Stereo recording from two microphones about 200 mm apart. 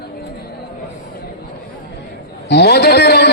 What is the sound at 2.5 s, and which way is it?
Speech, 55° left (ahead or behind).